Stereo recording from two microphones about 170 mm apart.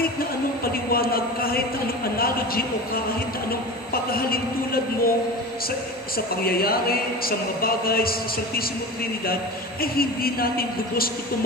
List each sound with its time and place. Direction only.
0.7 s a sound: 60° left (ahead or behind)
2.1 s speech: 60° left (ahead or behind)
6.1 s speech: 60° left (ahead or behind)
9.8 s speech: 60° left (ahead or behind)